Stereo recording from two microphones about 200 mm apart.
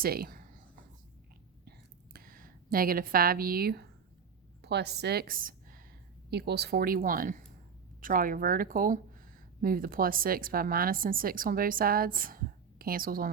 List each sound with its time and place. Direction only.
0.0 s speech: 50° right (ahead or behind)
2.1 s a woman's voice: 45° right (ahead or behind)
6.3 s a woman's voice: 55° right (ahead or behind)